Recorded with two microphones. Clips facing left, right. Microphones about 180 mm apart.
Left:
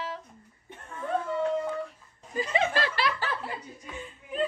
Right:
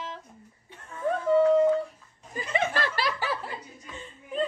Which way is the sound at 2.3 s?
55° right (ahead or behind).